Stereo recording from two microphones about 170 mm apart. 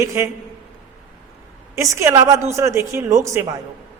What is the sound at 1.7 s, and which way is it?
A woman's voice, 20° right (ahead or behind).